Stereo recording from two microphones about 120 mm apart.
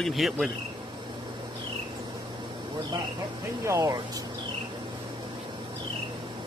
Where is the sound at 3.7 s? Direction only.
25° right (ahead or behind).